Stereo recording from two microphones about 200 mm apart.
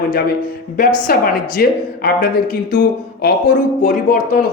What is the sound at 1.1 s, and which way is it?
Speech, 50° left (ahead or behind).